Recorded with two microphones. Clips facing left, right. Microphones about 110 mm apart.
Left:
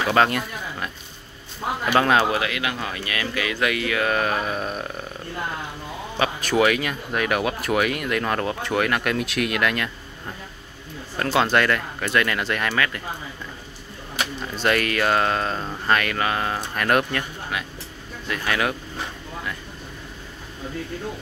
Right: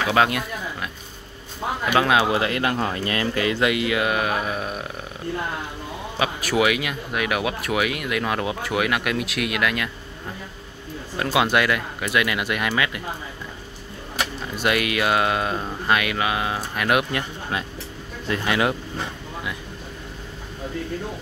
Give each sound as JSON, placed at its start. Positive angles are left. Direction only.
{"t": 0.1, "sound": "speech", "side_deg": -5}
{"t": 1.9, "sound": "speech", "side_deg": -5}
{"t": 2.3, "sound": "speech", "side_deg": -30}
{"t": 6.1, "sound": "speech", "side_deg": -5}
{"t": 11.1, "sound": "speech", "side_deg": -10}
{"t": 14.5, "sound": "speech", "side_deg": -10}
{"t": 17.1, "sound": "speech", "side_deg": -30}